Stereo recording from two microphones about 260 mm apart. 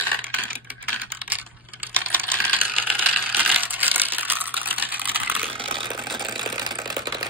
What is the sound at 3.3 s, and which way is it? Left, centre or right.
Computer keyboard, centre.